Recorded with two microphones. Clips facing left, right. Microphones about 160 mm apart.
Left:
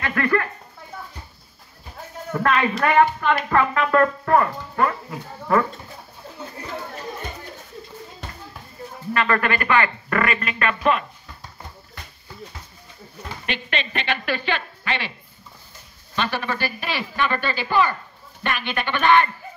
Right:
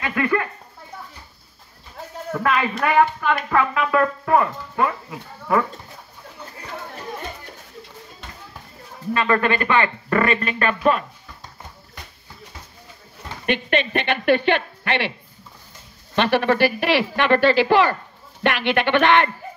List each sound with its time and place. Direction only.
0.0 s speech: 15° right (ahead or behind)
2.3 s speech: centre (ahead or behind)
9.1 s speech: 20° right (ahead or behind)
13.5 s speech: 55° right (ahead or behind)
16.2 s speech: 75° right (ahead or behind)